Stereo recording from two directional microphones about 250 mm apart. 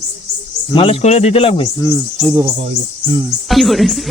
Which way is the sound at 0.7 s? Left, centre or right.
Left.